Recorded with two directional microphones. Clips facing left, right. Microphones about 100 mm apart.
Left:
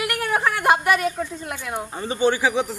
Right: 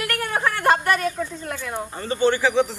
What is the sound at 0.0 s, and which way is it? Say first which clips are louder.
A woman's voice: left 2 dB; 10° left (ahead or behind).